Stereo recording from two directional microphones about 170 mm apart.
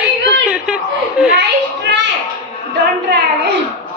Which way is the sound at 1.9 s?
90° right.